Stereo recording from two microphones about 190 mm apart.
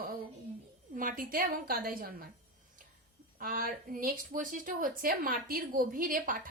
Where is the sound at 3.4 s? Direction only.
50° right (ahead or behind).